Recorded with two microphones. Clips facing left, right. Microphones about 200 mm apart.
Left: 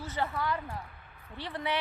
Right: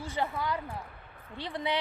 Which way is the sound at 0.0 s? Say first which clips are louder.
Right 1 dB; 15° right (ahead or behind).